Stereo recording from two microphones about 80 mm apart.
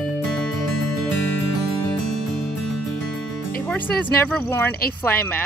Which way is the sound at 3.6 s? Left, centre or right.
Centre.